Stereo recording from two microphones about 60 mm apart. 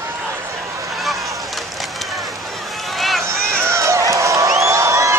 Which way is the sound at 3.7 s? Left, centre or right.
Right.